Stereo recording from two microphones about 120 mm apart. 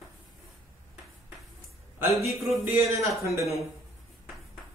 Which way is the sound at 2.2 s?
25° right (ahead or behind).